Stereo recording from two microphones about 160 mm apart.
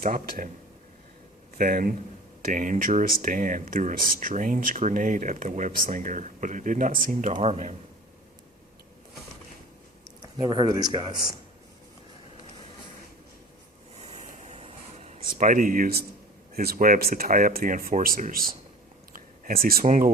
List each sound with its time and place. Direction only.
0.0 s speech: 60° right (ahead or behind)
1.5 s speech: 60° right (ahead or behind); by 7.8 s 45° right (ahead or behind)
10.2 s speech: 25° right (ahead or behind)
14.0 s a sound: 45° right (ahead or behind)
15.2 s speech: 55° right (ahead or behind)
19.1 s a sound: 65° right (ahead or behind)